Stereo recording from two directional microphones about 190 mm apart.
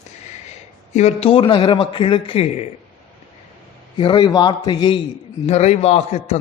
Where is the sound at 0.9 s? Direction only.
35° left (ahead or behind).